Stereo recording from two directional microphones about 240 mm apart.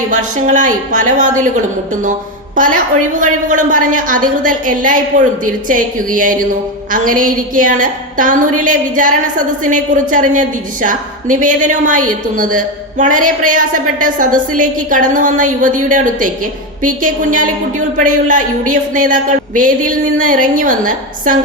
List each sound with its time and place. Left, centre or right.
0.1 s a woman's voice: right
2.6 s a woman's voice: right